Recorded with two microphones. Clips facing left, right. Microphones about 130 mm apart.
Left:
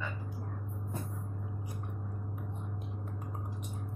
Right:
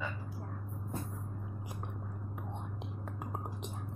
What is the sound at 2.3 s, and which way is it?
Whispering, 85° right.